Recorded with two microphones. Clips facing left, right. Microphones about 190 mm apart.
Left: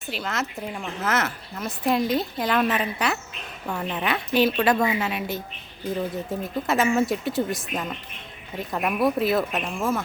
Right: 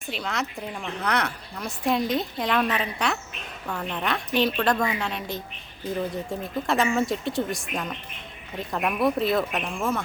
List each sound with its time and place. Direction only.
0.1 s a woman's voice: centre (ahead or behind)